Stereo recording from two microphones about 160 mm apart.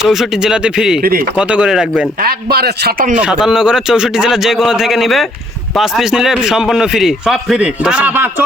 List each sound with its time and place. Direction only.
0.0 s a man's voice: centre (ahead or behind)
2.2 s a man's voice: 75° right (ahead or behind)
3.2 s a man's voice: 5° right (ahead or behind)